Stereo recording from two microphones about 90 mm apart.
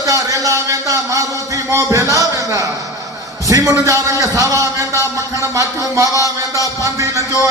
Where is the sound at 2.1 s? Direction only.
40° right (ahead or behind).